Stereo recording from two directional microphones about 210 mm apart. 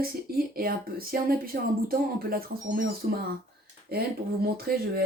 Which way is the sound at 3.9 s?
50° right (ahead or behind).